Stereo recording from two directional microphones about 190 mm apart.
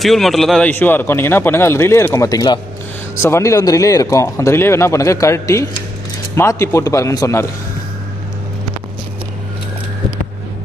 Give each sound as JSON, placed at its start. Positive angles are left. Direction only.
{"t": 0.0, "sound": "a man's voice", "side_deg": 0}